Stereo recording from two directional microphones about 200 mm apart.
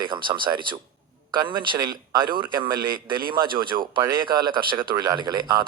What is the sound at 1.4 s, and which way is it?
Speech, 20° right (ahead or behind).